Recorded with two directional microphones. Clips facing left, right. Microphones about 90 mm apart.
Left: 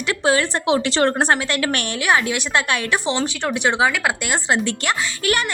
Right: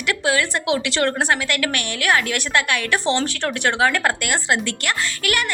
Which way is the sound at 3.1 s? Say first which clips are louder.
Even; 10° left (ahead or behind).